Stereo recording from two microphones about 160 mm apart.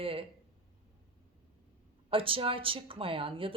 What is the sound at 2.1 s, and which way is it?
Speech, 35° right (ahead or behind).